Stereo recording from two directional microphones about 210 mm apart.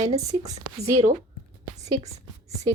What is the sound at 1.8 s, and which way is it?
Whispering, 30° right (ahead or behind).